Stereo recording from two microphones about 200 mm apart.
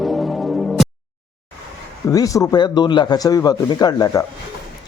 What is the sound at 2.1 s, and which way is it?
A man's voice, 15° left (ahead or behind).